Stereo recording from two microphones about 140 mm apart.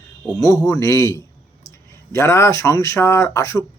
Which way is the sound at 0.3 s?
25° left (ahead or behind).